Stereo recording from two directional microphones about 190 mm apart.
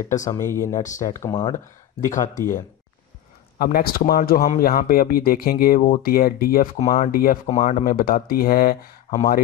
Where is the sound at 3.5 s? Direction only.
50° left (ahead or behind).